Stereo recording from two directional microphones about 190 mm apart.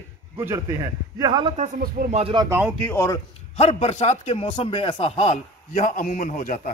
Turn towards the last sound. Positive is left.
turn(degrees=45)  # may be behind; listen again after turning